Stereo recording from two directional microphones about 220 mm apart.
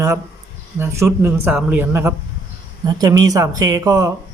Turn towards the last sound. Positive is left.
turn(degrees=-15)  # may be behind; listen again after turning